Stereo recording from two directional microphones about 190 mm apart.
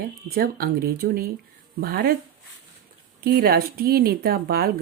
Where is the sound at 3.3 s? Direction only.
55° right (ahead or behind).